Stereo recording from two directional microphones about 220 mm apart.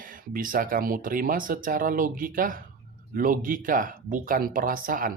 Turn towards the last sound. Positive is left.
turn(degrees=-40)  # may be behind; listen again after turning